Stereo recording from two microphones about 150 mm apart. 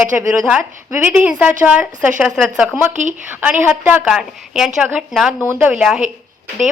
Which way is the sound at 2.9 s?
55° right (ahead or behind).